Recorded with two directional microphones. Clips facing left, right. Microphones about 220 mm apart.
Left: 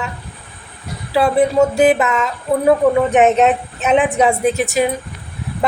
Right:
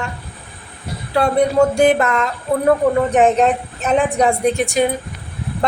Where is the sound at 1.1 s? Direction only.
5° left (ahead or behind).